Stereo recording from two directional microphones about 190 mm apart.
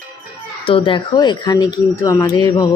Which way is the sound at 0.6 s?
30° left (ahead or behind).